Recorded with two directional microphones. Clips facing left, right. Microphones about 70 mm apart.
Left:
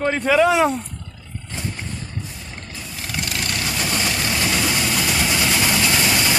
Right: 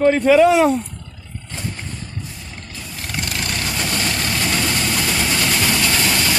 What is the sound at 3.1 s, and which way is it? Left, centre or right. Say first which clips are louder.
Vehicle: right 1 dB; centre.